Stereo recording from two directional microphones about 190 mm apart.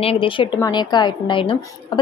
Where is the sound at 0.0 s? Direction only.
30° left (ahead or behind).